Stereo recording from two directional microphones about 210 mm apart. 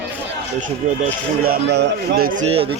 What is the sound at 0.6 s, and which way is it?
Speech, 40° right (ahead or behind).